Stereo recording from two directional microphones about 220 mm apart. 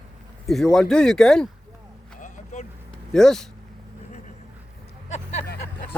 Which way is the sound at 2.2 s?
35° left (ahead or behind).